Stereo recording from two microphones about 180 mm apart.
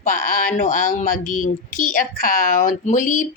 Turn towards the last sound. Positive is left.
turn(degrees=45)  # may be behind; listen again after turning